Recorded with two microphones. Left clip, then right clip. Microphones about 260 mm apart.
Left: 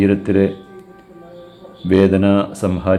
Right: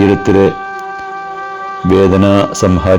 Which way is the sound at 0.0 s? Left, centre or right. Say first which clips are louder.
Right 7 dB; right.